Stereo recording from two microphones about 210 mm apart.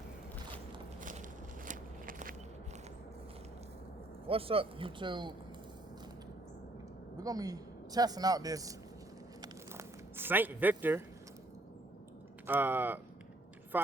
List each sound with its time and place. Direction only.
1.6 s biting: 35° right (ahead or behind)
4.3 s speech: 25° right (ahead or behind)
7.2 s speech: 15° right (ahead or behind)
9.4 s a sound: 10° right (ahead or behind)
12.5 s speech: 10° right (ahead or behind)